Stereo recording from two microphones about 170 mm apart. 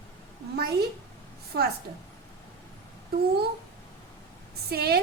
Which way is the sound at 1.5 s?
70° right (ahead or behind).